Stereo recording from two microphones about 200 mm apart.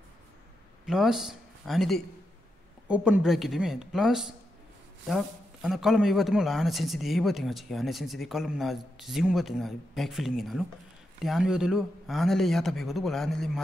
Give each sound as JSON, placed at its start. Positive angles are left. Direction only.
{"t": 0.8, "sound": "a man's voice", "side_deg": 0}